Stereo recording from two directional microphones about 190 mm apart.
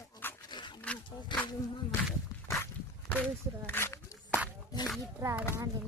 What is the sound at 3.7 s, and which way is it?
Walk, 10° left (ahead or behind).